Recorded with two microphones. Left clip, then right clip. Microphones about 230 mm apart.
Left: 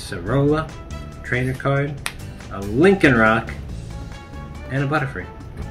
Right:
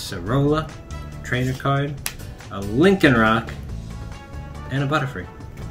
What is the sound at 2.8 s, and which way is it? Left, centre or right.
Speech, right.